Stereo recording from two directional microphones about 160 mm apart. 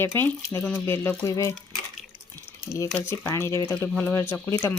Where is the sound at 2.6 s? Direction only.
20° left (ahead or behind).